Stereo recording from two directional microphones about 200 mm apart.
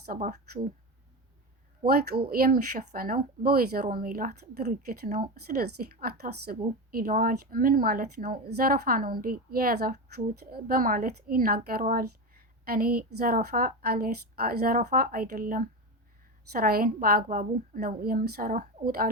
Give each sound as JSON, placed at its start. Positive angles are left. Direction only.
{"t": 0.0, "sound": "speech", "side_deg": -45}
{"t": 1.8, "sound": "speech", "side_deg": -50}